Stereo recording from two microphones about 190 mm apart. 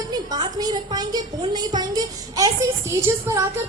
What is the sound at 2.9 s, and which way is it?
Speech, 15° right (ahead or behind).